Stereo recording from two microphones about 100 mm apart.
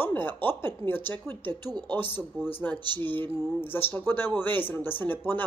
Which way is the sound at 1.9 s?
20° left (ahead or behind).